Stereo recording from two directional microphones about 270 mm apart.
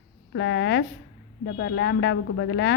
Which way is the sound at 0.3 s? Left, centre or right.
Left.